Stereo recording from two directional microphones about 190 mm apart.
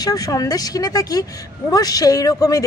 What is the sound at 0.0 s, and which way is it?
A man's voice, 20° left (ahead or behind).